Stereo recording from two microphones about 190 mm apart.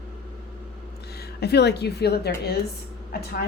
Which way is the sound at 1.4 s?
60° left (ahead or behind).